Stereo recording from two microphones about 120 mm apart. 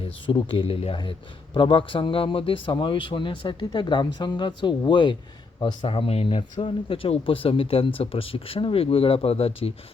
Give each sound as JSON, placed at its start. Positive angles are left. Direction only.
{"t": 0.0, "sound": "speech", "side_deg": 45}